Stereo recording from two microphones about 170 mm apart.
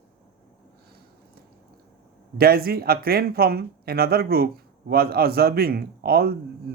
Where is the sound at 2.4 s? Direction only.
65° right (ahead or behind).